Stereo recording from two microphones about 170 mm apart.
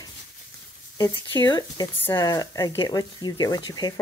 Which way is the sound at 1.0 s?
25° left (ahead or behind).